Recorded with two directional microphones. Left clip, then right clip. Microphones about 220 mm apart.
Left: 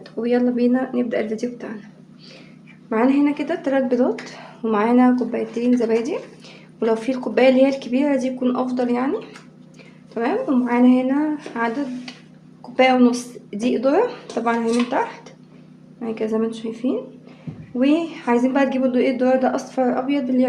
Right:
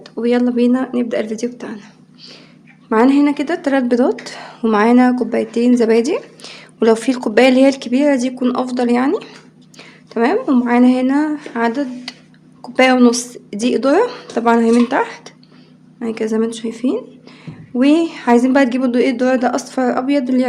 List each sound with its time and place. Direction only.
0.0 s a woman's voice: 30° right (ahead or behind)
2.9 s a woman's voice: 50° right (ahead or behind)